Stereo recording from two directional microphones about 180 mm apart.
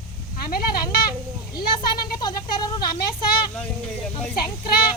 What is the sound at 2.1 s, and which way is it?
Speech, 20° left (ahead or behind).